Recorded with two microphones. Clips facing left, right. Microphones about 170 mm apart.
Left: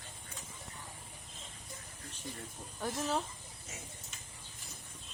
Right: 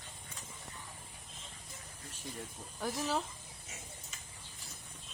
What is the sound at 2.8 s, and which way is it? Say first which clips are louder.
Speech: even; centre (ahead or behind).